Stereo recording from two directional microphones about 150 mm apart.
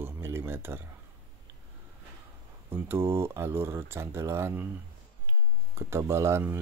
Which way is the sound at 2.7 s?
15° right (ahead or behind).